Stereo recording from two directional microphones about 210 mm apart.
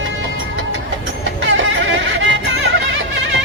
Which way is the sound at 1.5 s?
60° right (ahead or behind).